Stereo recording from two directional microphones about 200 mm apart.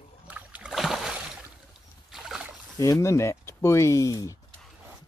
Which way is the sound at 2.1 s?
Centre (ahead or behind).